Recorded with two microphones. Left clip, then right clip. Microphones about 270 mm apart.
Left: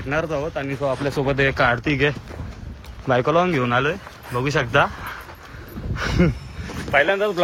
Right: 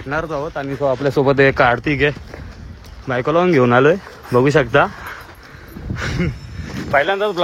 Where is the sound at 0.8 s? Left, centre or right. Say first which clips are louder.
Right 7 dB; right.